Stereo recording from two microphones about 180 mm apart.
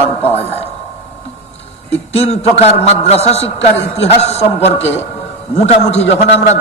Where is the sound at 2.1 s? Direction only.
35° left (ahead or behind).